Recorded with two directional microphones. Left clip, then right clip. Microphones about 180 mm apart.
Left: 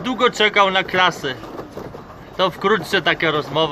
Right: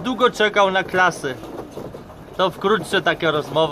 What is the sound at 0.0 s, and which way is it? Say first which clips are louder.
Speech: left 1 dB; 5° left (ahead or behind).